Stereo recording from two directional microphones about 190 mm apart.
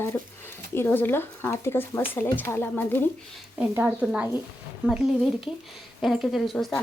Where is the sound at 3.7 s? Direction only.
5° right (ahead or behind).